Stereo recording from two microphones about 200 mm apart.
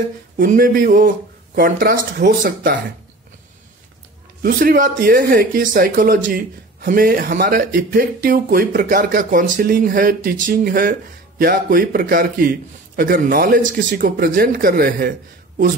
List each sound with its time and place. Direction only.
0.4 s speech: 45° right (ahead or behind)
4.4 s speech: 45° right (ahead or behind)